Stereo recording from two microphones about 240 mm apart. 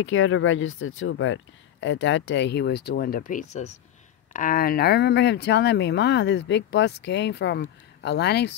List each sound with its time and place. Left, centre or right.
0.0 s speech: left